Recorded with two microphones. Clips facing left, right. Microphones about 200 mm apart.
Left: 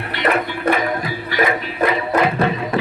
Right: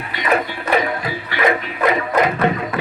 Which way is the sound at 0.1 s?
60° left (ahead or behind).